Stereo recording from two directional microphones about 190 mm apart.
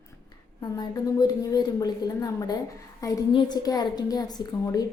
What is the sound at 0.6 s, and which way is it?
A woman's voice, 20° left (ahead or behind).